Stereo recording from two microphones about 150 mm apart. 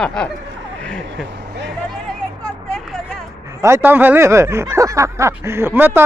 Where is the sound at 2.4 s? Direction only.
5° left (ahead or behind).